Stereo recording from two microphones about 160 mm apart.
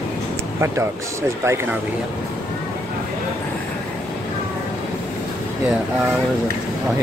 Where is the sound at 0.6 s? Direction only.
15° right (ahead or behind).